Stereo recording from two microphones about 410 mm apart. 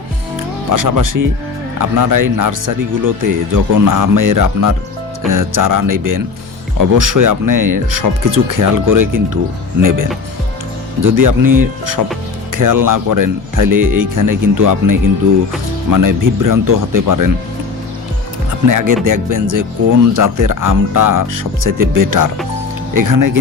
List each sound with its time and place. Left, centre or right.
0.7 s speech: right
18.7 s speech: right